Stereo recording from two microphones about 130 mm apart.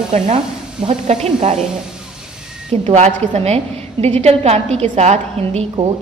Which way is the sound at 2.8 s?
60° right (ahead or behind).